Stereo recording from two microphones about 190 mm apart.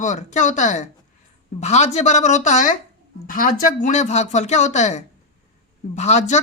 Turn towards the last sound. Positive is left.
turn(degrees=35)  # may be behind; listen again after turning